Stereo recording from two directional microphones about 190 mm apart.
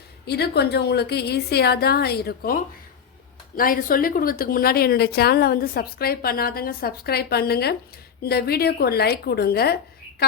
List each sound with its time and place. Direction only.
0.3 s a woman's voice: 60° left (ahead or behind)
3.6 s a woman's voice: 50° left (ahead or behind)